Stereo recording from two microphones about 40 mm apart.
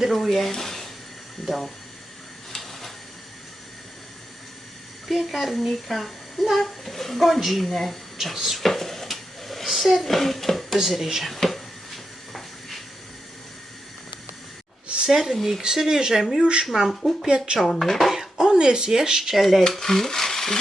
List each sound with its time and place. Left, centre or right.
0.0 s speech: centre
2.5 s a sound: centre
5.0 s speech: centre
8.5 s dishes: centre
10.8 s speech: centre
12.3 s a sound: centre
15.0 s speech: centre
17.6 s speech: centre
18.5 s speech: centre
19.3 s speech: centre